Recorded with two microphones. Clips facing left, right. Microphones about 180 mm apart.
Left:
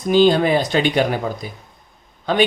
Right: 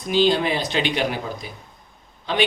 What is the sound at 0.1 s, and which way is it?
Speech, 50° left (ahead or behind).